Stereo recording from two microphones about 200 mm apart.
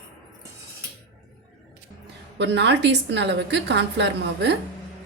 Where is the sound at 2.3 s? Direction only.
60° right (ahead or behind).